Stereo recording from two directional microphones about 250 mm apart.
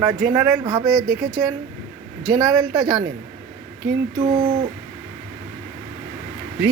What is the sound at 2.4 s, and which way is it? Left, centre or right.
Speech, centre.